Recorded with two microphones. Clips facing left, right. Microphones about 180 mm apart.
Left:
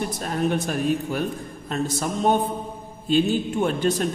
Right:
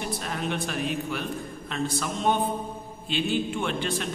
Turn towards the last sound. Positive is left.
turn(degrees=40)  # may be behind; listen again after turning